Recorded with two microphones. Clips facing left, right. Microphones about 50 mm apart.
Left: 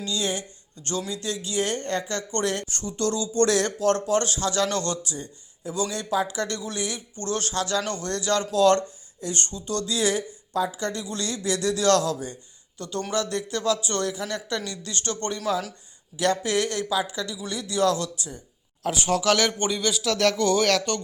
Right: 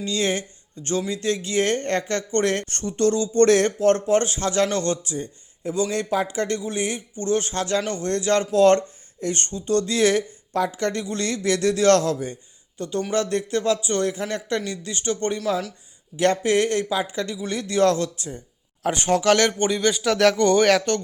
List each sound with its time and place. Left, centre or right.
0.0 s speech: right
0.8 s speech: right
7.5 s speech: right
13.8 s speech: right
14.1 s speech: right
14.6 s speech: right
16.1 s speech: right
19.0 s speech: centre
19.8 s speech: right
20.1 s speech: right